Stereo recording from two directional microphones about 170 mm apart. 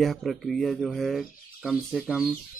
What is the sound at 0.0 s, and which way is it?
Speech, centre (ahead or behind).